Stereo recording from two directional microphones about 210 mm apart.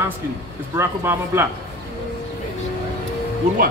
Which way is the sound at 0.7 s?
10° right (ahead or behind).